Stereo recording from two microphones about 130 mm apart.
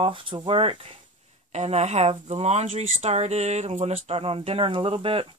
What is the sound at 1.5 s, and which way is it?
A woman's voice, 60° right (ahead or behind).